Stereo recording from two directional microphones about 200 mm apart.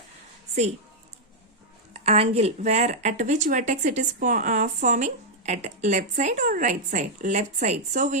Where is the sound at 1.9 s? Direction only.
30° right (ahead or behind).